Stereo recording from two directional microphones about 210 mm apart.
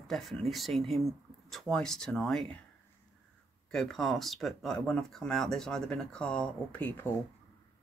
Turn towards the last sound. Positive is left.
turn(degrees=10)  # may be behind; listen again after turning